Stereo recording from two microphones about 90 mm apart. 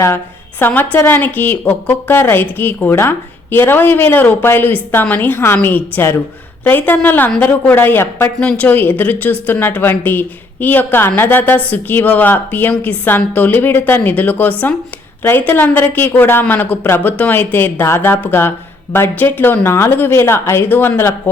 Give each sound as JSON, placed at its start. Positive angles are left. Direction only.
{"t": 0.6, "sound": "a woman's voice", "side_deg": 20}